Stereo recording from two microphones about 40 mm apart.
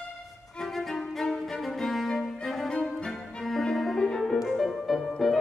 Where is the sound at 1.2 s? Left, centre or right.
Centre.